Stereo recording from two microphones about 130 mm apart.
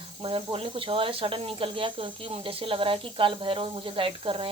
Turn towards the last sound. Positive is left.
turn(degrees=-45)  # may be behind; listen again after turning